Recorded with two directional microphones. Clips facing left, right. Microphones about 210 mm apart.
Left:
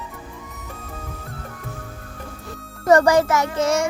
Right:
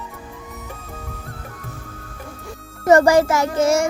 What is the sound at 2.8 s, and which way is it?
A child's voice, 25° right (ahead or behind).